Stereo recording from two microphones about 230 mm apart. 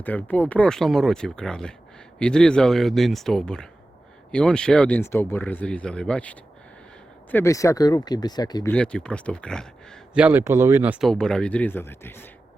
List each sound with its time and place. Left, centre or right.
0.0 s speech: centre
8.7 s speech: centre